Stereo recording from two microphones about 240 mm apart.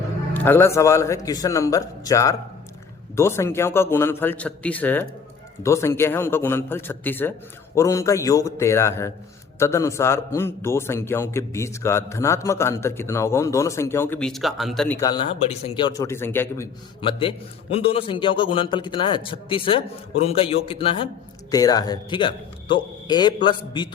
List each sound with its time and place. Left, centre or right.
0.3 s a man's voice: centre
17.0 s a man's voice: left